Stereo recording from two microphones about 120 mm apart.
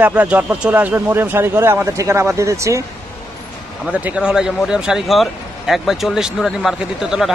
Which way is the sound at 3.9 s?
10° right (ahead or behind).